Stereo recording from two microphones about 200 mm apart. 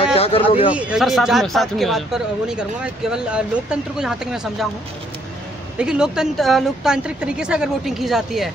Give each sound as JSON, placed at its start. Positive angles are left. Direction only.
{"t": 0.0, "sound": "a sound", "side_deg": 30}
{"t": 0.7, "sound": "speech", "side_deg": -5}
{"t": 5.8, "sound": "speech", "side_deg": -5}